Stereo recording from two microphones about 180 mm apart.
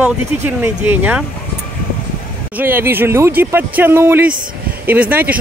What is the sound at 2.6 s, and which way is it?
Speech, 10° right (ahead or behind).